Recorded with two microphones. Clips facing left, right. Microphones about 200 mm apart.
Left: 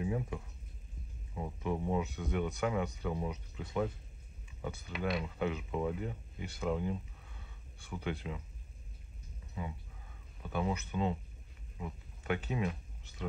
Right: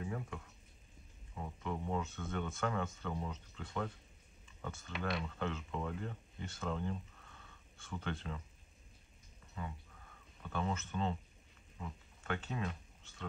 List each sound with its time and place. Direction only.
0.0 s frying: 15° left (ahead or behind)
1.3 s speech: 15° left (ahead or behind)
10.4 s speech: 10° left (ahead or behind)
12.2 s speech: 15° left (ahead or behind)